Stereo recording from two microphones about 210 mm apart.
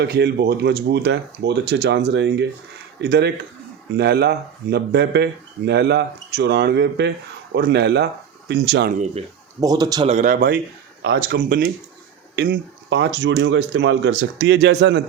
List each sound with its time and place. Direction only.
0.0 s speech: 50° right (ahead or behind)
9.6 s speech: 15° right (ahead or behind)
10.1 s a man's voice: 35° right (ahead or behind)
11.0 s speech: 55° right (ahead or behind)